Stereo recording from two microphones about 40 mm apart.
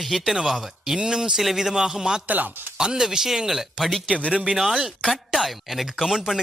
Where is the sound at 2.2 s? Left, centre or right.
Right.